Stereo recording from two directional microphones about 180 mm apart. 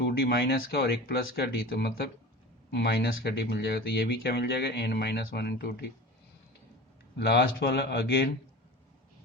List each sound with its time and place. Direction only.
0.0 s speech: 60° left (ahead or behind)
7.2 s speech: 70° left (ahead or behind)